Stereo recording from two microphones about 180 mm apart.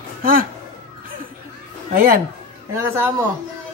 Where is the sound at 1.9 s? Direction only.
55° right (ahead or behind).